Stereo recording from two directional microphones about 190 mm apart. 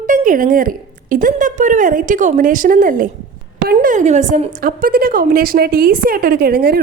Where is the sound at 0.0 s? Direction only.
45° right (ahead or behind).